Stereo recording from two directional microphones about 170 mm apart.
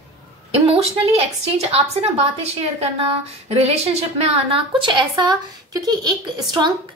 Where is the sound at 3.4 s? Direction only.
40° right (ahead or behind).